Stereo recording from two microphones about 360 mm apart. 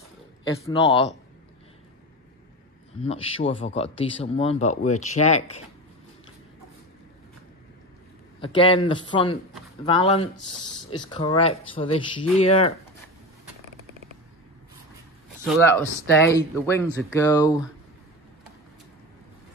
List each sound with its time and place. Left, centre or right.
3.0 s speech: centre
8.4 s speech: centre
15.4 s speech: centre